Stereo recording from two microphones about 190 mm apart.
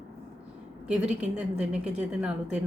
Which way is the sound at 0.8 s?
5° right (ahead or behind).